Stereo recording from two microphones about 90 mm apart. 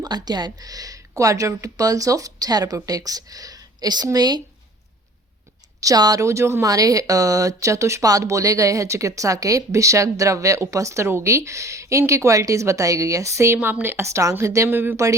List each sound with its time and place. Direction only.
0.0 s speech: 50° right (ahead or behind)
5.8 s speech: 40° right (ahead or behind)
13.6 s a woman's voice: 20° right (ahead or behind)